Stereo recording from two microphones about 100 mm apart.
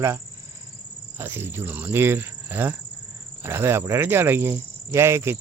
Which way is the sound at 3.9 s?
25° right (ahead or behind).